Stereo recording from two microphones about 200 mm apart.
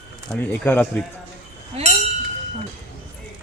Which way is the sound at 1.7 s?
30° right (ahead or behind).